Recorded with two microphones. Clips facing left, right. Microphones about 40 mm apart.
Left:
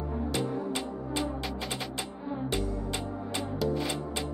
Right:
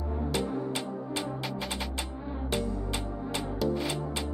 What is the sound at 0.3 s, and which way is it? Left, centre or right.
Music, centre.